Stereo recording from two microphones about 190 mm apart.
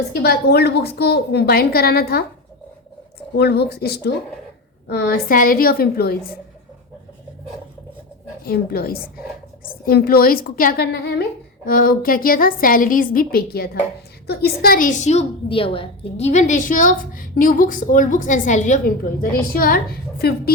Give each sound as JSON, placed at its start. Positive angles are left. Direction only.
{"t": 0.1, "sound": "a woman's voice", "side_deg": 55}
{"t": 3.3, "sound": "a woman's voice", "side_deg": 60}
{"t": 8.4, "sound": "a woman's voice", "side_deg": 55}